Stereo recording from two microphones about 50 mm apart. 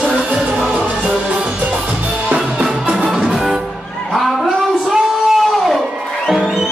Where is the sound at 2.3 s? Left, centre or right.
Right.